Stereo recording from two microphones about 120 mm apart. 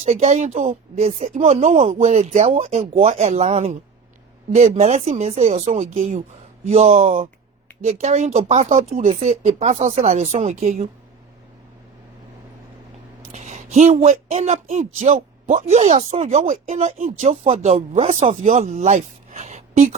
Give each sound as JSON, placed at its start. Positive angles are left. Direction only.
{"t": 0.0, "sound": "speech", "side_deg": -75}
{"t": 6.7, "sound": "speech", "side_deg": -60}
{"t": 13.3, "sound": "speech", "side_deg": -80}